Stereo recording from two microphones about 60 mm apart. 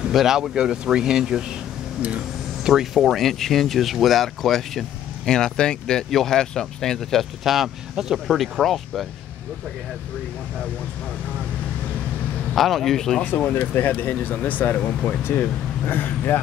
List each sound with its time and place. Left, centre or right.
0.1 s speech: centre
2.0 s a sound: right
2.7 s speech: centre
12.5 s speech: centre
13.6 s speech: left